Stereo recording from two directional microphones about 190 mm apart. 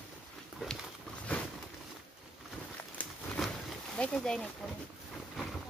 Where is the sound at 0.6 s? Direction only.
Centre (ahead or behind).